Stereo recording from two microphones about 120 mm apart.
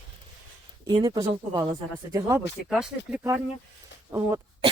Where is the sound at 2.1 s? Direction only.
25° right (ahead or behind).